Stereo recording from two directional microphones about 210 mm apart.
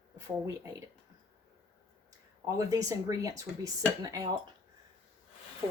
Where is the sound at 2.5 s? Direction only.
15° right (ahead or behind).